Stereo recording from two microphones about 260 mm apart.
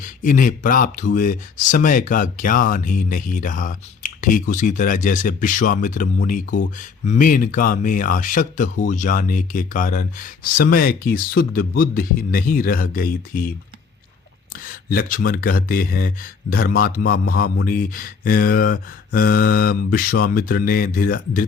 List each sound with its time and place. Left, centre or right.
0.0 s speech: left
6.5 s speech: left
7.1 s speech: left
14.6 s speech: left